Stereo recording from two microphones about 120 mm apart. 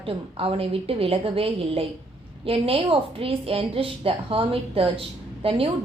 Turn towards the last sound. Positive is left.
turn(degrees=-50)  # may be behind; listen again after turning